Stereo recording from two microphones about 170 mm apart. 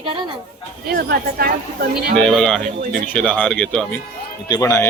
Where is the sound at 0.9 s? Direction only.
65° right (ahead or behind).